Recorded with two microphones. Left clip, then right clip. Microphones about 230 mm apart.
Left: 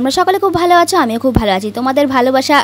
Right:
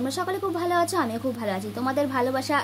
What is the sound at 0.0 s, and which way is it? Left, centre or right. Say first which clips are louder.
Speech: left 15 dB; left.